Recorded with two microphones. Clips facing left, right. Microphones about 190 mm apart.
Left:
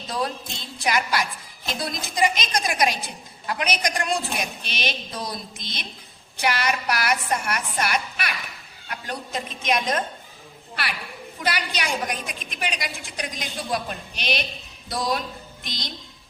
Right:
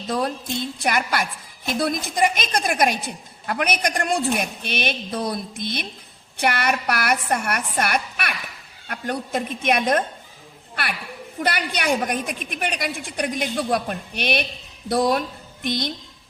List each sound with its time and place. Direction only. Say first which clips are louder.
0.1 s a woman's voice: right 4 dB; 55° right (ahead or behind)
11.3 s a woman's voice: right 3 dB; 55° right (ahead or behind)